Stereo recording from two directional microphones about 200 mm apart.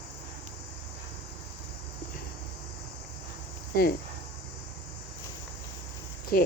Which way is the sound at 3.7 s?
50° left (ahead or behind).